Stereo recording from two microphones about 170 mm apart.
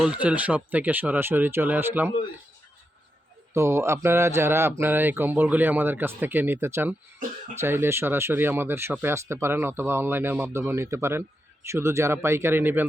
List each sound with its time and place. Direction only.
0.0 s speech: 5° right (ahead or behind)
3.5 s speech: 15° right (ahead or behind)